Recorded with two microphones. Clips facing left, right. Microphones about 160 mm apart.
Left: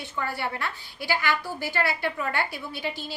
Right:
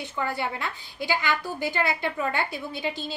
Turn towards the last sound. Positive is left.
turn(degrees=-20)  # may be behind; listen again after turning